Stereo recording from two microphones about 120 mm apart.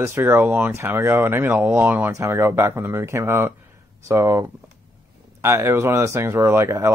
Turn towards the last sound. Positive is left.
turn(degrees=-20)  # may be behind; listen again after turning